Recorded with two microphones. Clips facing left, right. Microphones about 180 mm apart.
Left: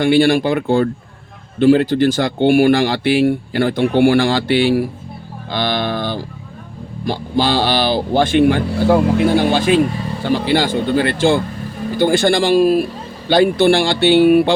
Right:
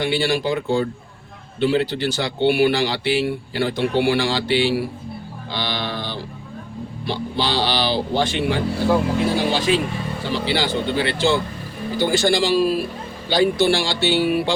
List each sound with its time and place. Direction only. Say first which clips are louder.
0.0 s speech: left 8 dB; 50° left (ahead or behind)
5.5 s music: left 7 dB; 50° left (ahead or behind)
7.0 s speech: left 6 dB; 45° left (ahead or behind)